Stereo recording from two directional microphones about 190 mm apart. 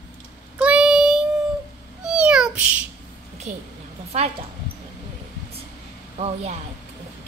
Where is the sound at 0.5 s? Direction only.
5° right (ahead or behind).